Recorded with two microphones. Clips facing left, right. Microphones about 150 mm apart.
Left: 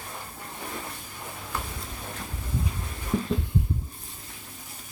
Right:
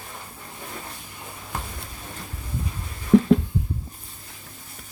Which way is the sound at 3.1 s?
90° right.